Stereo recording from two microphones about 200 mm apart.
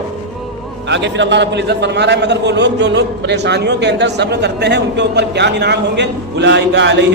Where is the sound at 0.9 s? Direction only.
65° right (ahead or behind).